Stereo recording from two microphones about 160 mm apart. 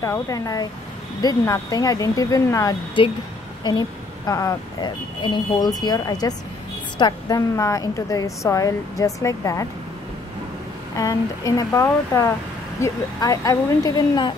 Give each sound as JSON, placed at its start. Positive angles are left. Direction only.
{"t": 0.0, "sound": "speech", "side_deg": 20}
{"t": 4.3, "sound": "speech", "side_deg": 20}
{"t": 11.0, "sound": "speech", "side_deg": 20}